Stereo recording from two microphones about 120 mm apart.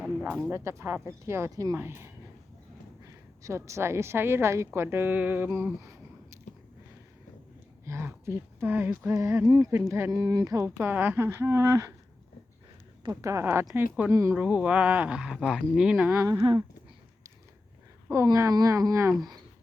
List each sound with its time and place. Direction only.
0.0 s a sound: 10° right (ahead or behind)
0.5 s a woman's voice: 25° right (ahead or behind)
6.5 s biting: 90° left
7.9 s a woman's voice: 20° right (ahead or behind)
13.0 s a woman's voice: 30° right (ahead or behind)
14.1 s a woman's voice: 25° right (ahead or behind)
14.3 s speech: 10° right (ahead or behind)
16.3 s speech: 40° right (ahead or behind)
18.3 s a woman's voice: 30° right (ahead or behind)